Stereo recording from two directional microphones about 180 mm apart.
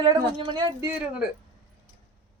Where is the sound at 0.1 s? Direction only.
25° right (ahead or behind).